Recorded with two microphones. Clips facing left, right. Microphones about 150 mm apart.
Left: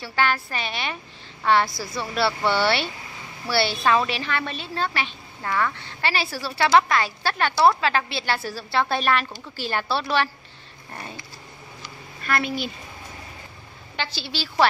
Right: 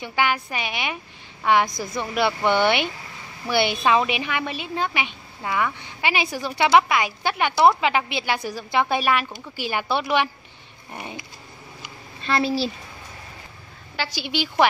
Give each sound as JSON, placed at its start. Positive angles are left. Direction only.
{"t": 0.0, "sound": "a woman's voice", "side_deg": -15}
{"t": 12.2, "sound": "a woman's voice", "side_deg": -30}
{"t": 13.9, "sound": "a woman's voice", "side_deg": -10}